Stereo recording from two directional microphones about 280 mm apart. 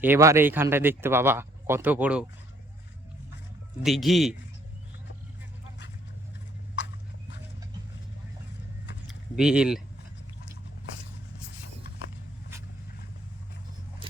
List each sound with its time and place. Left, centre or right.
0.0 s speech: centre
3.8 s speech: centre
6.8 s horse: left
9.4 s speech: centre